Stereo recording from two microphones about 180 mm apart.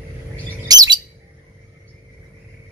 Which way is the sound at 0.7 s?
20° right (ahead or behind).